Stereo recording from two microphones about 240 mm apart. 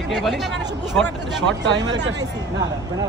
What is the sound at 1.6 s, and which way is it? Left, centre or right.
Speech, right.